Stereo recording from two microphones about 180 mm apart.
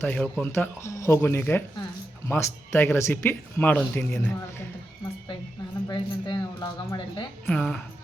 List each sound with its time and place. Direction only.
0.0 s speech: 10° left (ahead or behind)
5.9 s speech: 25° left (ahead or behind)
7.4 s a woman's voice: 5° left (ahead or behind)